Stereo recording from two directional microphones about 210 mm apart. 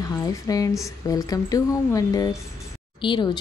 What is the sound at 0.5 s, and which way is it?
Speech, 15° left (ahead or behind).